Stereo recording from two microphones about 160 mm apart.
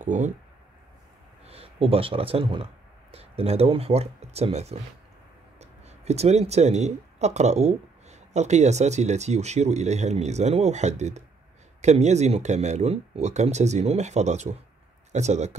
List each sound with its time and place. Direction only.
0.0 s speech: 50° right (ahead or behind)
1.4 s speech: 35° right (ahead or behind)